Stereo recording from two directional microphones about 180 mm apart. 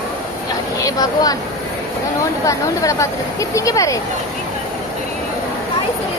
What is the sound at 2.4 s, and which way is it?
Speech, 20° left (ahead or behind).